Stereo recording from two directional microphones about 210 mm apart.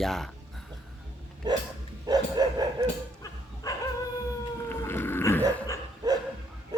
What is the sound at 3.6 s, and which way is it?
Dog, 15° left (ahead or behind).